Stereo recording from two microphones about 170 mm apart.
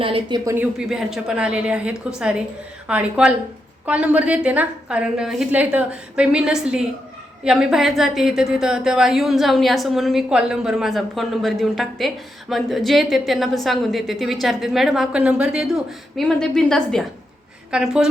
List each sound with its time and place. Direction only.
0.0 s speech: 30° right (ahead or behind)
0.5 s a woman's voice: 5° right (ahead or behind)